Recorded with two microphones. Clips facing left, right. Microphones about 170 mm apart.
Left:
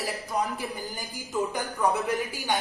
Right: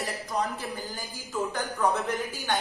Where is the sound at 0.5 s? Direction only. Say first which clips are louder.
Left 1 dB; 15° left (ahead or behind).